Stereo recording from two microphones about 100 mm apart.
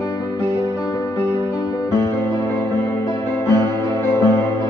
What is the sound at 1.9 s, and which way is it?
Music, 25° left (ahead or behind).